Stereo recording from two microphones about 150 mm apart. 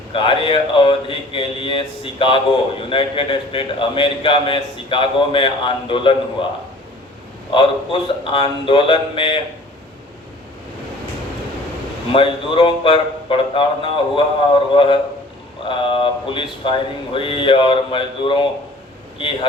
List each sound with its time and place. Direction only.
0.1 s a man's voice: 35° left (ahead or behind)
7.5 s a man's voice: 35° left (ahead or behind)
12.1 s a man's voice: 35° left (ahead or behind)